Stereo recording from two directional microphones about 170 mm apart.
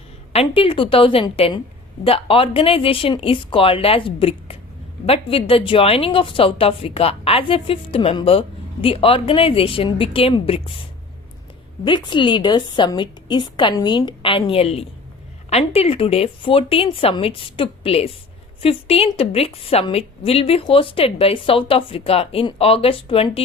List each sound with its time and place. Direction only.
0.3 s a woman's voice: 30° left (ahead or behind)
11.9 s a woman's voice: 30° left (ahead or behind)